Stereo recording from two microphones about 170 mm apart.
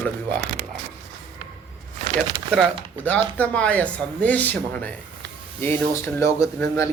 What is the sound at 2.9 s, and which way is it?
Speech, 10° left (ahead or behind).